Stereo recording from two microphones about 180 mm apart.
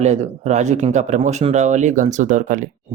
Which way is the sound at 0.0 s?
40° right (ahead or behind).